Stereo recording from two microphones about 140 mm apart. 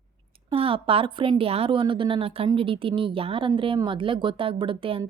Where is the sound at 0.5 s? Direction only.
40° right (ahead or behind).